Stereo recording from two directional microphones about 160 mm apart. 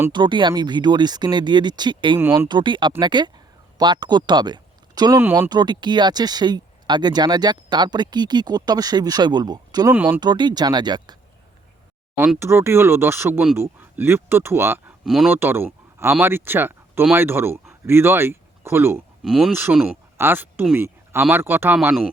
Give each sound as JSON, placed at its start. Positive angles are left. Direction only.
{"t": 0.1, "sound": "speech", "side_deg": -30}
{"t": 2.1, "sound": "speech", "side_deg": -15}
{"t": 2.5, "sound": "speech", "side_deg": -30}
{"t": 5.2, "sound": "speech", "side_deg": -15}
{"t": 5.5, "sound": "speech", "side_deg": -25}
{"t": 9.9, "sound": "speech", "side_deg": -10}
{"t": 10.2, "sound": "speech", "side_deg": -25}
{"t": 12.4, "sound": "speech", "side_deg": -15}
{"t": 15.0, "sound": "speech", "side_deg": 0}
{"t": 15.3, "sound": "speech", "side_deg": -15}
{"t": 19.2, "sound": "speech", "side_deg": 0}